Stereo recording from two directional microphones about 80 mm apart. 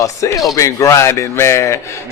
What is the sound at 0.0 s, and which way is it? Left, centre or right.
A man's voice, left.